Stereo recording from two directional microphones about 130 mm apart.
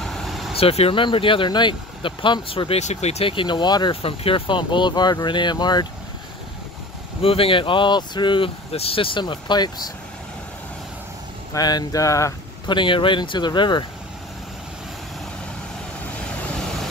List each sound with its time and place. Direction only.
0.0 s vehicle: centre (ahead or behind)
0.6 s speech: 50° left (ahead or behind); by 5.9 s 35° left (ahead or behind)
7.2 s speech: 45° left (ahead or behind)
11.5 s speech: 30° left (ahead or behind)
12.6 s speech: 40° left (ahead or behind)